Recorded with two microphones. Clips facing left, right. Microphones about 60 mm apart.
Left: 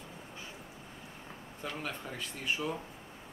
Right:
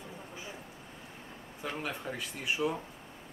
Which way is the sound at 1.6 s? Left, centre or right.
Centre.